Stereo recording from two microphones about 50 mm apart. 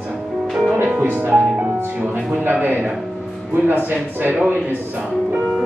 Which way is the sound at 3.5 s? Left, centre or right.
Right.